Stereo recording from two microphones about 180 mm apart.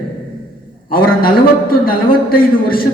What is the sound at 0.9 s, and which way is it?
A man's voice, 55° left (ahead or behind).